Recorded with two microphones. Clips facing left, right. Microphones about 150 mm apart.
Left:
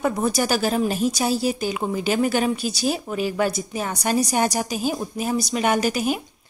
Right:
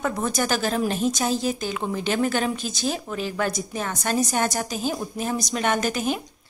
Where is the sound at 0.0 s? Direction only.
10° left (ahead or behind).